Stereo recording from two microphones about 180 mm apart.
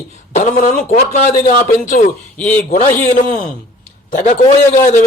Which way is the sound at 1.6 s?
45° left (ahead or behind).